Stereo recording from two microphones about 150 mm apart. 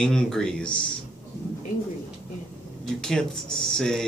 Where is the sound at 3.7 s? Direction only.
5° left (ahead or behind).